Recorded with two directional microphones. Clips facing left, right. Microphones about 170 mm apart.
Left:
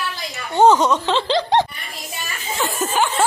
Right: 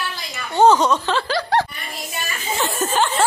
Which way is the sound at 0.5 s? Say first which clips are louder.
Left 1 dB; 20° left (ahead or behind).